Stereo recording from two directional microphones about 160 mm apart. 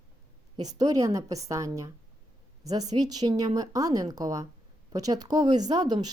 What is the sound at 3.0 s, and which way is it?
Speech, 25° right (ahead or behind).